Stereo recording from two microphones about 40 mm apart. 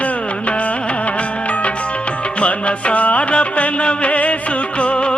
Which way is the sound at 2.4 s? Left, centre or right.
Left.